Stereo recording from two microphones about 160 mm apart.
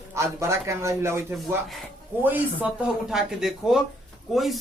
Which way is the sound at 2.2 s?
10° right (ahead or behind).